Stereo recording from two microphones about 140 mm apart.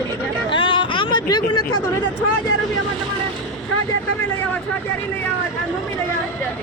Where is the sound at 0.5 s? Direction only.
35° left (ahead or behind).